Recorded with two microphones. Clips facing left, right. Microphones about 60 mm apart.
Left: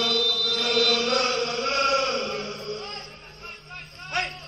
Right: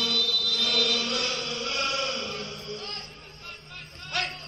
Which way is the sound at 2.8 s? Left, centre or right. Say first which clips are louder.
Left 3 dB; left.